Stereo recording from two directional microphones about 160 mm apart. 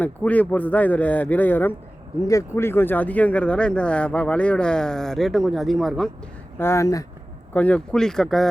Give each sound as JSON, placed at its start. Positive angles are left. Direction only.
{"t": 0.0, "sound": "speech", "side_deg": 10}
{"t": 6.6, "sound": "speech", "side_deg": 15}